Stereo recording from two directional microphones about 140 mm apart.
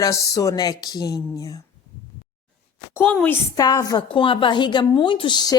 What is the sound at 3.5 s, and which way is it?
Speech, 25° left (ahead or behind).